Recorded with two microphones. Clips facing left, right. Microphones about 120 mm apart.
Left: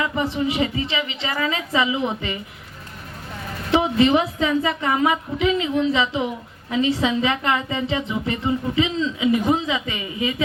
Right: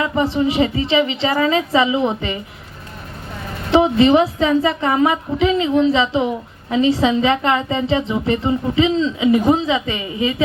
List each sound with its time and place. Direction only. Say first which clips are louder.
0.0 s a woman's voice: right 5 dB; 30° right (ahead or behind)
3.7 s a woman's voice: right 5 dB; 30° right (ahead or behind)